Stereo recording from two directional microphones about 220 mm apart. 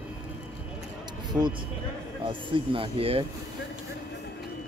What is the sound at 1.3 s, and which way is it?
Speech, 20° right (ahead or behind).